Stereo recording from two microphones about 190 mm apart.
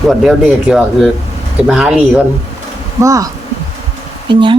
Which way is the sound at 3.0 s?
15° right (ahead or behind).